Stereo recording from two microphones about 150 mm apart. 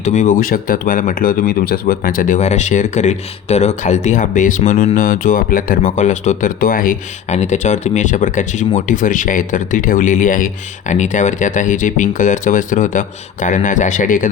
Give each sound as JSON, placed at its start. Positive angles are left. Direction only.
{"t": 0.0, "sound": "speech", "side_deg": 55}
{"t": 7.3, "sound": "speech", "side_deg": 50}